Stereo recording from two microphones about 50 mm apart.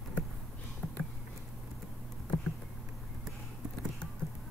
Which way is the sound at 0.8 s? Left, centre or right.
Left.